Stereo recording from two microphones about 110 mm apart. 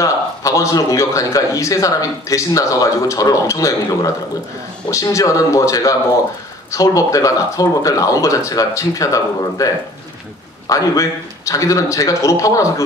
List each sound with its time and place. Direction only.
0.0 s a man's voice: 30° left (ahead or behind)
10.7 s a man's voice: 30° left (ahead or behind)